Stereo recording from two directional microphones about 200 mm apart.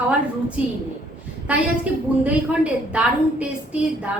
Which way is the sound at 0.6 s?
5° right (ahead or behind).